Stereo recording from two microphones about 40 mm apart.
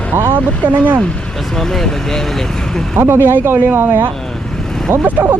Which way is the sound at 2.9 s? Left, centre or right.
Right.